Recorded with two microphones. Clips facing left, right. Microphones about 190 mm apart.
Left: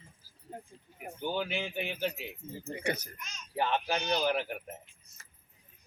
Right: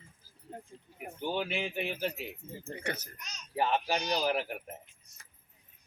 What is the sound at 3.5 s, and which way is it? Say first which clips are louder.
Speech: right 1 dB; 5° right (ahead or behind).